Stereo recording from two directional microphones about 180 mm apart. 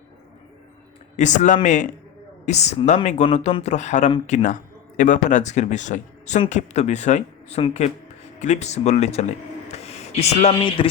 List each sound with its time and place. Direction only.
1.1 s a man's voice: 40° left (ahead or behind)
9.7 s a sound: 35° left (ahead or behind)
10.8 s mantra: 30° left (ahead or behind)